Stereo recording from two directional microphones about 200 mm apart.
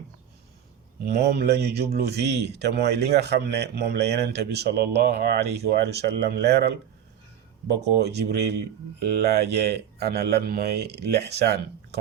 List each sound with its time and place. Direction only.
1.1 s a man's voice: 50° right (ahead or behind)
8.0 s a man's voice: 55° right (ahead or behind)